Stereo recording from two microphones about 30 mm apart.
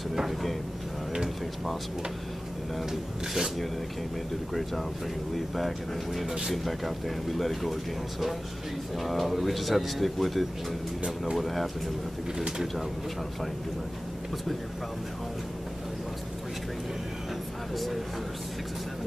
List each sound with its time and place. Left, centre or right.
2.8 s speech: centre
5.6 s speech: centre